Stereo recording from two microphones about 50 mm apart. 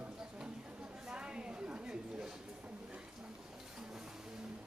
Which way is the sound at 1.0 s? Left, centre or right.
Centre.